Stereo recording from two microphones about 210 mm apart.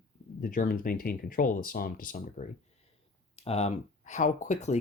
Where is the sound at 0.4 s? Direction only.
40° left (ahead or behind).